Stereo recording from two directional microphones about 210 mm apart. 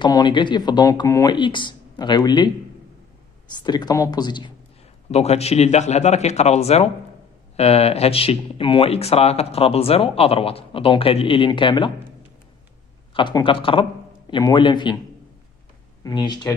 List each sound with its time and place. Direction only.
0.0 s speech: 20° left (ahead or behind)
3.6 s speech: 20° left (ahead or behind)
5.1 s a man's voice: 30° left (ahead or behind)
13.1 s speech: 25° left (ahead or behind)
16.0 s speech: 20° left (ahead or behind)